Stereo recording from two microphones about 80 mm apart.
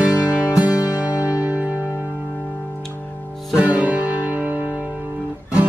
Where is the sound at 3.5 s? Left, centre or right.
Centre.